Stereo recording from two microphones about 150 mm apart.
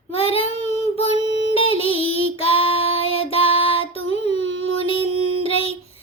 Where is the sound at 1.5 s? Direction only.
40° left (ahead or behind).